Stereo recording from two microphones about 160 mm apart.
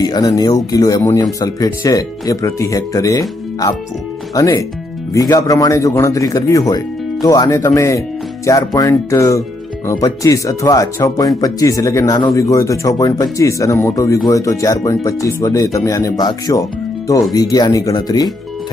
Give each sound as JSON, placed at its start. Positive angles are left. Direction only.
{"t": 0.0, "sound": "speech", "side_deg": 25}